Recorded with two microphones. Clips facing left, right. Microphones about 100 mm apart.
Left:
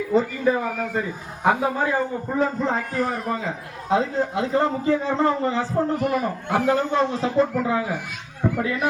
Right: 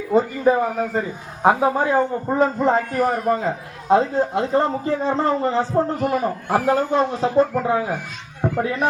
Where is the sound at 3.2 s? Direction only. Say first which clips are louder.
Right 6 dB; 45° right (ahead or behind).